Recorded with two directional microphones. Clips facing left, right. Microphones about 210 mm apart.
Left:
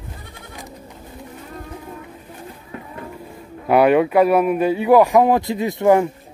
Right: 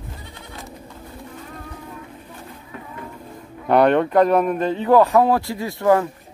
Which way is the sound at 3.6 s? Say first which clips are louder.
Left 2 dB; 5° left (ahead or behind).